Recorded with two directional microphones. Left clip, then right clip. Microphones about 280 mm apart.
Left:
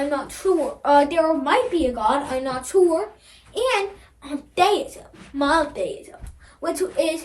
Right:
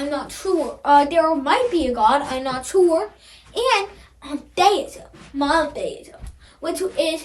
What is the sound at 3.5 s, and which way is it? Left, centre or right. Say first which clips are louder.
A child's voice: right 2 dB; centre.